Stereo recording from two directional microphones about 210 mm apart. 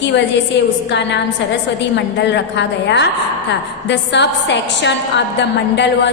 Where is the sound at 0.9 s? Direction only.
55° left (ahead or behind).